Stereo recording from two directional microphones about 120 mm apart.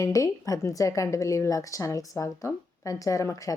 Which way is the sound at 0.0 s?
30° left (ahead or behind).